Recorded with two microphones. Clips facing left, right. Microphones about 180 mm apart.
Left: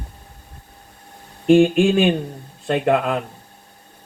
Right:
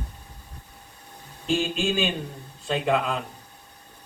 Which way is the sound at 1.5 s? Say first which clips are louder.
Left 12 dB; 60° left (ahead or behind).